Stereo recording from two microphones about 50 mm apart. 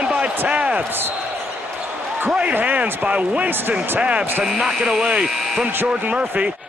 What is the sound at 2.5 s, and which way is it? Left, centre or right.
Speech, right.